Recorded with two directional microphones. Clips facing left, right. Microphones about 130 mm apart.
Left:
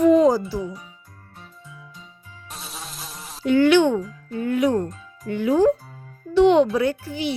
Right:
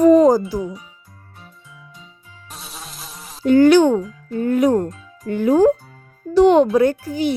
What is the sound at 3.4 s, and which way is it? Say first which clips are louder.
A child's voice: right 5 dB; 40° right (ahead or behind).